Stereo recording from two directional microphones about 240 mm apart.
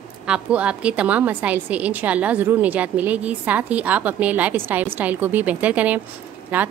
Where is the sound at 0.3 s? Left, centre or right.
Centre.